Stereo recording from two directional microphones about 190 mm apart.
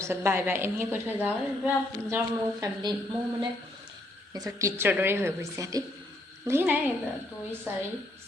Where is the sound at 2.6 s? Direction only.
20° right (ahead or behind).